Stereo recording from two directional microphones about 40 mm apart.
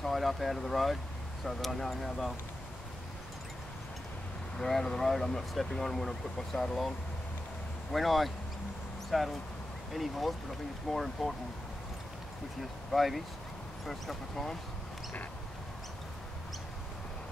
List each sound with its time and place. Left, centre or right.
0.0 s speech: centre
4.6 s speech: centre
7.9 s speech: centre
12.9 s speech: centre